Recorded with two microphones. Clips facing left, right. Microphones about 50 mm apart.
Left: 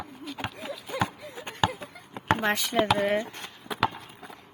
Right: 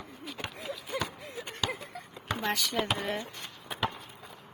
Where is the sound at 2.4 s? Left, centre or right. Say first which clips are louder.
Left 2 dB; left.